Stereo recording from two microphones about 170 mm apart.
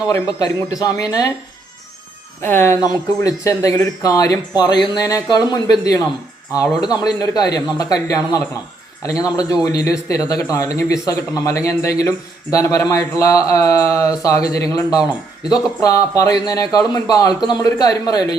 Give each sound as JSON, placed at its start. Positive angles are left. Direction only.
{"t": 0.1, "sound": "a man's voice", "side_deg": 20}
{"t": 2.4, "sound": "a man's voice", "side_deg": 15}